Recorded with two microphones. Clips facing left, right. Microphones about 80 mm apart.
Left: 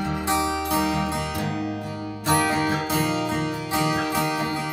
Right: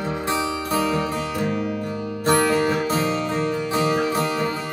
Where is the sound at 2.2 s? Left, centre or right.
Right.